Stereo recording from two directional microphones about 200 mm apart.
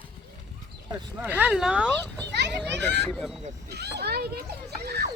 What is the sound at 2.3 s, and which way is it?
Children playing, 60° right (ahead or behind).